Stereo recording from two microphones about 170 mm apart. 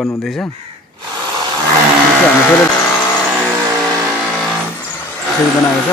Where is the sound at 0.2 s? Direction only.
Centre (ahead or behind).